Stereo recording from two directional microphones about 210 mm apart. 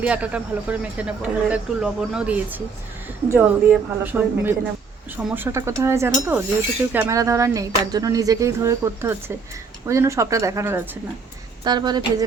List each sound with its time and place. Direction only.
0.0 s speech: 5° right (ahead or behind)